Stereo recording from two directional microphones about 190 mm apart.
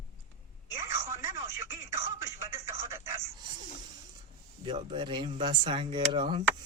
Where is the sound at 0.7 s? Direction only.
15° right (ahead or behind).